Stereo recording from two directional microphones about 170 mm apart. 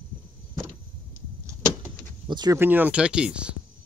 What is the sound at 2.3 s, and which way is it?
Speech, 25° right (ahead or behind).